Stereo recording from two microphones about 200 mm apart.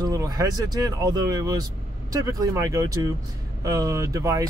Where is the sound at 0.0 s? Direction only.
20° right (ahead or behind).